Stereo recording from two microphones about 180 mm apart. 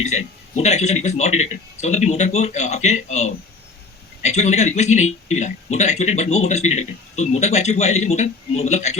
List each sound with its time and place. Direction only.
0.0 s speech: 40° left (ahead or behind)